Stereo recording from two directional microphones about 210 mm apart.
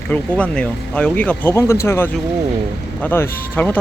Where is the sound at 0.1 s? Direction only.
5° left (ahead or behind).